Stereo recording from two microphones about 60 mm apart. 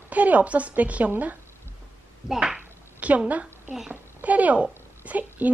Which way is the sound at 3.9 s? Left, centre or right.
Right.